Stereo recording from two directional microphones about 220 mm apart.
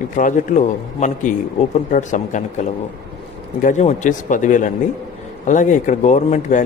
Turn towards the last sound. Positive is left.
turn(degrees=30)  # may be behind; listen again after turning